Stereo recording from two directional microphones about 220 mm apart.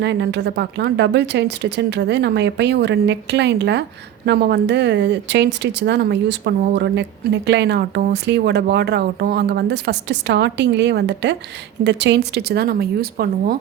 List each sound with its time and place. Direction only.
0.0 s speech: 50° right (ahead or behind)